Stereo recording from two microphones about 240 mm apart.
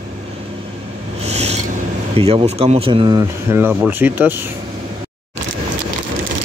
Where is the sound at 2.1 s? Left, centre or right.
Right; by 4.4 s centre.